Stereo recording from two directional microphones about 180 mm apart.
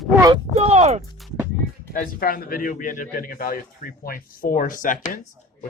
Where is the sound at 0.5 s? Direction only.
35° right (ahead or behind).